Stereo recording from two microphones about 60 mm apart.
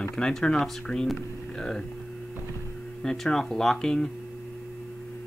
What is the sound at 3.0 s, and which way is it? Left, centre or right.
Speech, centre.